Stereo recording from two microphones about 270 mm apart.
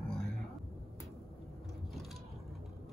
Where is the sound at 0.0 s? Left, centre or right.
Centre.